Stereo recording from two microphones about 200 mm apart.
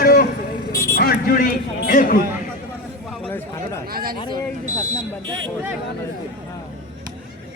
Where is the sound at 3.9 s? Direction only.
45° right (ahead or behind).